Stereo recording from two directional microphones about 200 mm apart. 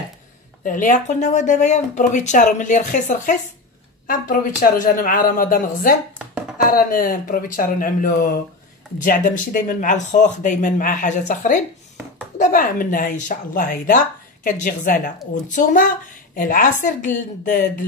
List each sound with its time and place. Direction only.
0.7 s speech: 40° left (ahead or behind)